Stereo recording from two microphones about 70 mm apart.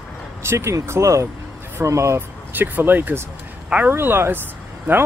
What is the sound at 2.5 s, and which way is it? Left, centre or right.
Speech, right.